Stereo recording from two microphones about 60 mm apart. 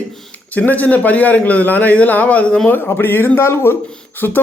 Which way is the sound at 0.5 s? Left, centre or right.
Left.